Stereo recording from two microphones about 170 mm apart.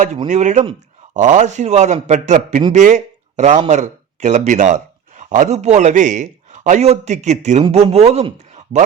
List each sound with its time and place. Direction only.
0.3 s a man's voice: 45° right (ahead or behind)